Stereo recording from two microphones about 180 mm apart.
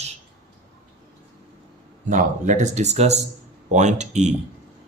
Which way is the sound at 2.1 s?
45° right (ahead or behind).